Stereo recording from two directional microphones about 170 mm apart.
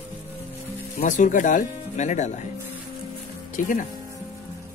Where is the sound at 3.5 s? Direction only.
50° left (ahead or behind).